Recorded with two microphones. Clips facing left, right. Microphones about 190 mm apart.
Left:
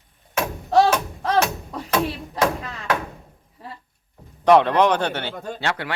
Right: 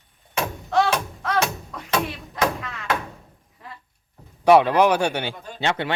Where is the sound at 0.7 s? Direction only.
35° left (ahead or behind).